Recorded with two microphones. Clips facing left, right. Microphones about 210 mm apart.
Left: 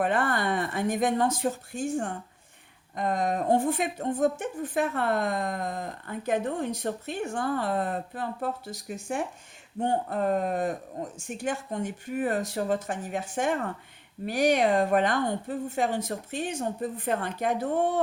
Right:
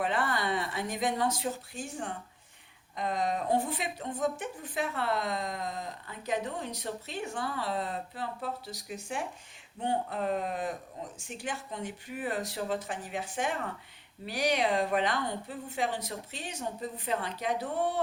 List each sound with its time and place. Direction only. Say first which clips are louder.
0.0 s a woman's voice: left 5 dB; 50° left (ahead or behind)